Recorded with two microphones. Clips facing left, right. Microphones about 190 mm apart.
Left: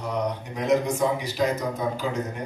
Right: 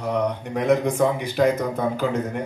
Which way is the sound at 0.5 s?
55° right (ahead or behind).